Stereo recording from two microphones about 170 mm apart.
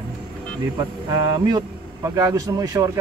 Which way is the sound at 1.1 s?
25° right (ahead or behind).